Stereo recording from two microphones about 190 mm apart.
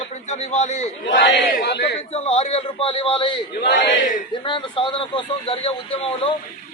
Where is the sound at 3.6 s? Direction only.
70° left (ahead or behind).